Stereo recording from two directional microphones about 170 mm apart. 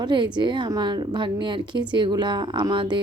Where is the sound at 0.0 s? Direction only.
25° right (ahead or behind).